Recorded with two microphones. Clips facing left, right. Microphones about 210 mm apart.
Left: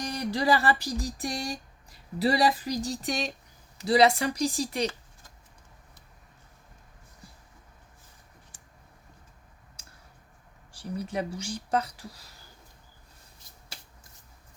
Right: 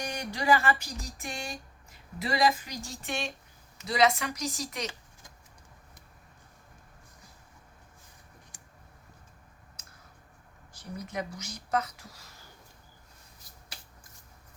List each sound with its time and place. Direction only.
0.0 s music: 35° left (ahead or behind)
3.8 s speech: 35° left (ahead or behind)
10.7 s speech: 30° left (ahead or behind)